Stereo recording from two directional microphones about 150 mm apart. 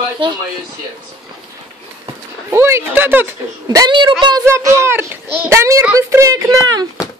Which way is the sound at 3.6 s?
25° right (ahead or behind).